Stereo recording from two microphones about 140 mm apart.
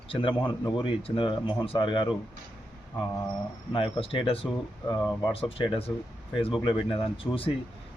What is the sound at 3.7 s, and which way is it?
Speech, 40° left (ahead or behind).